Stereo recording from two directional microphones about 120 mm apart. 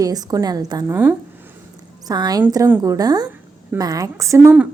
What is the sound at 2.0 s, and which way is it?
A woman's voice, 35° right (ahead or behind).